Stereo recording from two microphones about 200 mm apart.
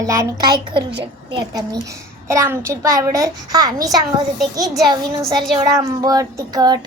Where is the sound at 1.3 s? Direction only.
20° right (ahead or behind).